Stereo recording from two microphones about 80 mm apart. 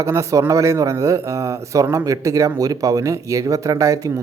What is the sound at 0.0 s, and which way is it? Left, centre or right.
Speech, right.